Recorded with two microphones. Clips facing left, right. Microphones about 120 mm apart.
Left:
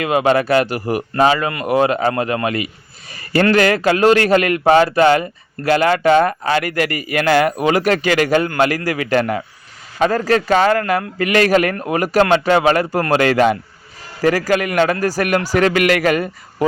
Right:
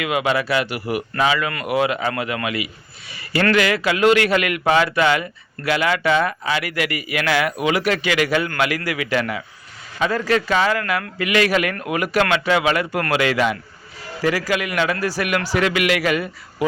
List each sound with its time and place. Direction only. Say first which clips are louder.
0.0 s a man's voice: left 5 dB; 40° left (ahead or behind)
3.1 s a sound: left 6 dB; 45° left (ahead or behind)
3.5 s a man's voice: left 4 dB; 40° left (ahead or behind)